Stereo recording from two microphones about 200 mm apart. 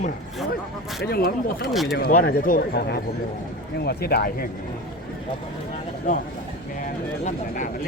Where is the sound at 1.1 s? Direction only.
50° left (ahead or behind).